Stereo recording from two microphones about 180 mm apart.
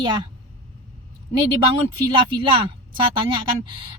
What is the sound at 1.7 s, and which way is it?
Speech, 25° right (ahead or behind).